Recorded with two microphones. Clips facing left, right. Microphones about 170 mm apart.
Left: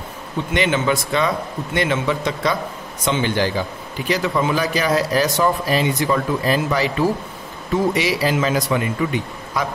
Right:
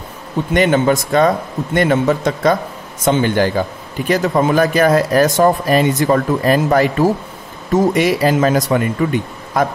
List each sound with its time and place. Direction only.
0.5 s a man's voice: 45° right (ahead or behind)